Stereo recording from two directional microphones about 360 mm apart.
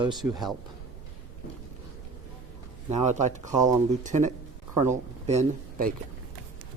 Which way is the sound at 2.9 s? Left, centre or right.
Centre.